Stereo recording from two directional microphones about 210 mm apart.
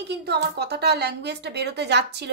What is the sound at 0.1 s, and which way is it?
A woman's voice, 50° right (ahead or behind).